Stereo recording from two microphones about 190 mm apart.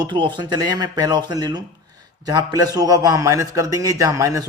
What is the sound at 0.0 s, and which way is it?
A man's voice, 25° right (ahead or behind).